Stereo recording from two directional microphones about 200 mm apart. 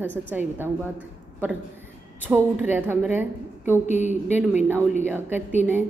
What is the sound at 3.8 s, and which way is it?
Speech, 35° left (ahead or behind).